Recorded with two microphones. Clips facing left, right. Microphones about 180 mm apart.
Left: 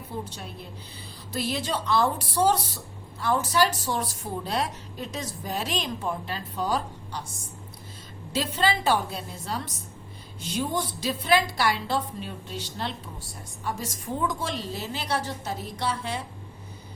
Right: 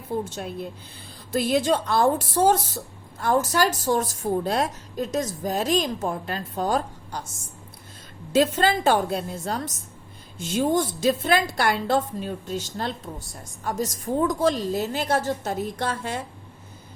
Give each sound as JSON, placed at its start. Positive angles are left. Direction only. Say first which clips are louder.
{"t": 0.1, "sound": "speech", "louder": "right 8 dB", "side_deg": -50}
{"t": 1.3, "sound": "speech", "louder": "right 8 dB", "side_deg": -50}
{"t": 8.3, "sound": "speech", "louder": "right 6 dB", "side_deg": -50}